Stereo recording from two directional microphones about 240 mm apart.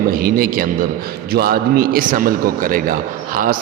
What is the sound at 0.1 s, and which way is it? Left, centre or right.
A man's voice, right.